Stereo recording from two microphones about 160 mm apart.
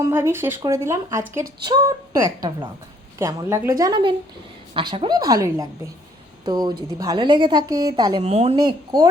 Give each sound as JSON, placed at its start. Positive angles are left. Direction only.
{"t": 0.0, "sound": "a woman's voice", "side_deg": -15}
{"t": 3.2, "sound": "a woman's voice", "side_deg": -15}
{"t": 8.2, "sound": "a woman's voice", "side_deg": -40}
{"t": 8.5, "sound": "a woman's voice", "side_deg": -25}